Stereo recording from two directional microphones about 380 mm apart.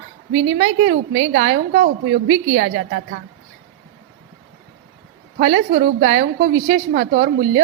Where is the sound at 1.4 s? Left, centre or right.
Right.